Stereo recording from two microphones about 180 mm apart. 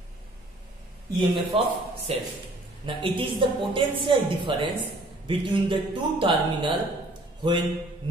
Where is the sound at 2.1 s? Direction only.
35° right (ahead or behind).